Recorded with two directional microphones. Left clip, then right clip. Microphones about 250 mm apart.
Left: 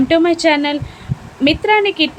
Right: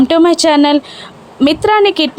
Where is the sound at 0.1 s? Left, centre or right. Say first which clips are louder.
Right 1 dB; right.